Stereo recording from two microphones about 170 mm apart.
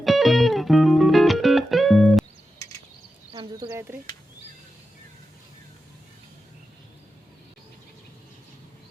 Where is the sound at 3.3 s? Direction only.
25° right (ahead or behind).